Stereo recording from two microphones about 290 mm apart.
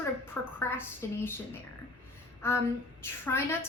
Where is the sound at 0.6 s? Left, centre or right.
Centre.